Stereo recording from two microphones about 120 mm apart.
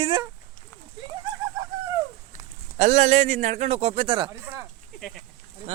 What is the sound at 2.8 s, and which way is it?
Speech, 70° right (ahead or behind).